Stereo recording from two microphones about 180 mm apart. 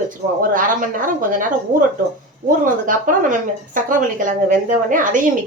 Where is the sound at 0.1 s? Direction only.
50° right (ahead or behind).